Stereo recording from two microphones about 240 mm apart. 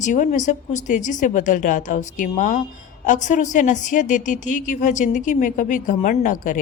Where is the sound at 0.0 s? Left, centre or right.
Left.